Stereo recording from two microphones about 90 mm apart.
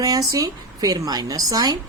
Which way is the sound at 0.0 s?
45° right (ahead or behind).